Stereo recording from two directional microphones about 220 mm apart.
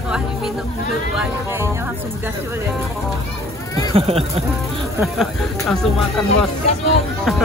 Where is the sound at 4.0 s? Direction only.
25° right (ahead or behind).